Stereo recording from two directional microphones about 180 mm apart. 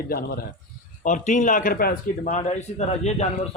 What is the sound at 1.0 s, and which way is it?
Speech, 45° left (ahead or behind).